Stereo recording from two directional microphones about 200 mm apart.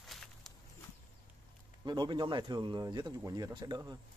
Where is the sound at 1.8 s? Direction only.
20° right (ahead or behind).